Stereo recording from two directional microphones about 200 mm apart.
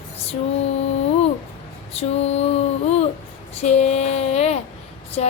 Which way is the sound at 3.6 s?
35° left (ahead or behind).